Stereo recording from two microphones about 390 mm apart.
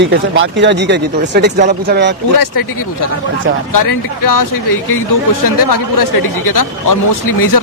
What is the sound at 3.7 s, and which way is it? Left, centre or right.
Speech, left.